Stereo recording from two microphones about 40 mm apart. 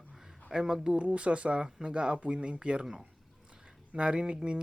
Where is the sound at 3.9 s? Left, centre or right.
Right.